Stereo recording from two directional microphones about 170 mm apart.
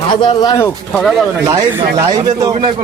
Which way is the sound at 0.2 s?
20° left (ahead or behind).